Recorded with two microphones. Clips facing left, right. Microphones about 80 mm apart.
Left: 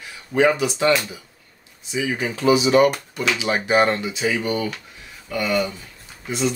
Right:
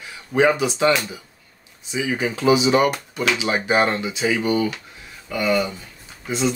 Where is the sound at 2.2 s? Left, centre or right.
Right.